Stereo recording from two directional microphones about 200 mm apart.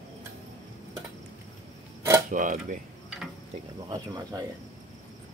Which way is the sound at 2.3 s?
40° right (ahead or behind).